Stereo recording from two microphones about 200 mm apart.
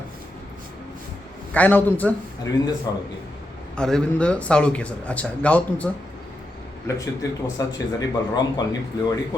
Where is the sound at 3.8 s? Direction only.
5° left (ahead or behind); by 8.6 s 20° left (ahead or behind).